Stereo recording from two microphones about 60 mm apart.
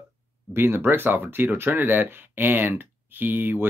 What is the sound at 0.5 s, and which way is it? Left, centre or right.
Speech, right.